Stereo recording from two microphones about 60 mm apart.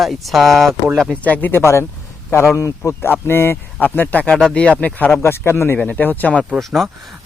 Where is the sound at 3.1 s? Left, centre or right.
Left.